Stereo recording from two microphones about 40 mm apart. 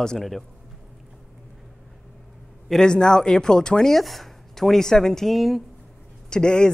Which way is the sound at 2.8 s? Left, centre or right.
Centre.